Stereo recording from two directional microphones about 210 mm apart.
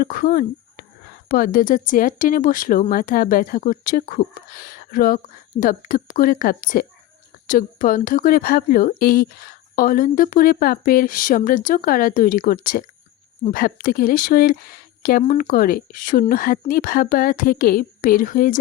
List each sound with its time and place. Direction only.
0.0 s a woman's voice: 45° left (ahead or behind)